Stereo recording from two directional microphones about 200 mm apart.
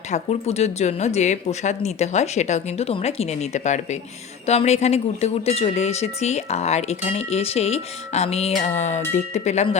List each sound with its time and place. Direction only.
0.1 s speech: 30° left (ahead or behind)